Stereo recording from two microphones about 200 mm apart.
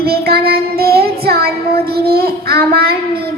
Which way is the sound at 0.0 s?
50° right (ahead or behind).